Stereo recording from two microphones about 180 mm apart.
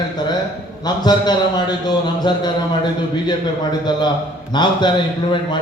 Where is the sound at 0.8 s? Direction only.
25° left (ahead or behind).